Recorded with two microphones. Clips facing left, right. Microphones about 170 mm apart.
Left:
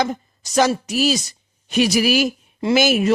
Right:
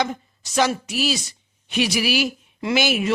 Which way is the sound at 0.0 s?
40° left (ahead or behind).